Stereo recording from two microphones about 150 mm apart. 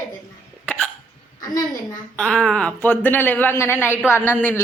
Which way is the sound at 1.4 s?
25° left (ahead or behind).